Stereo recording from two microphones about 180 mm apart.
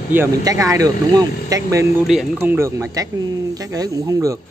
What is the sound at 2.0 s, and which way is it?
Speech, 5° right (ahead or behind).